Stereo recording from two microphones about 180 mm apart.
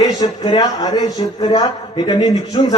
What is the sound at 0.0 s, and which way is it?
Speech, 20° left (ahead or behind).